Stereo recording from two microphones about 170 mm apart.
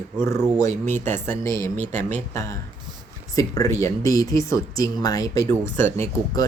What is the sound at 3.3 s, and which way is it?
Speech, 20° left (ahead or behind).